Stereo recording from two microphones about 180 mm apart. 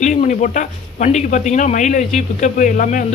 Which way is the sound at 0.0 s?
45° left (ahead or behind).